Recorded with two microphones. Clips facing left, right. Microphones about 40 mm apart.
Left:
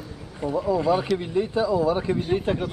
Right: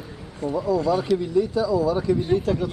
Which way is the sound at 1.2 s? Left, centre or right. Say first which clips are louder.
Right 2 dB; left.